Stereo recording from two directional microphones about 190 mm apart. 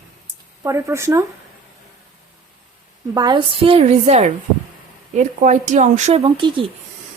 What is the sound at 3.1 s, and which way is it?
A woman's voice, 25° right (ahead or behind).